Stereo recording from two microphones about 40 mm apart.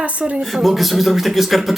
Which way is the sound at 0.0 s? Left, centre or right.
Right.